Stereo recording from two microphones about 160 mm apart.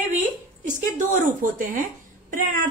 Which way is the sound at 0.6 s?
50° right (ahead or behind).